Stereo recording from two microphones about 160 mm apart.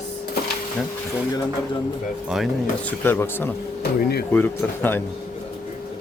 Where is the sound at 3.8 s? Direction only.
85° left.